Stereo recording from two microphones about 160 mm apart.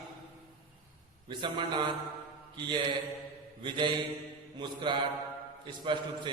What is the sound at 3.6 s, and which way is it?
A man's voice, 30° right (ahead or behind).